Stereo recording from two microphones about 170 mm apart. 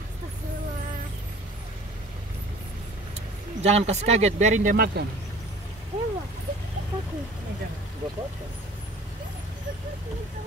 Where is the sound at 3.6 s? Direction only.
40° right (ahead or behind); by 5.1 s 70° right (ahead or behind).